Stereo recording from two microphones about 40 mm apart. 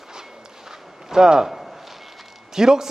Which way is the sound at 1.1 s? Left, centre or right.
Centre.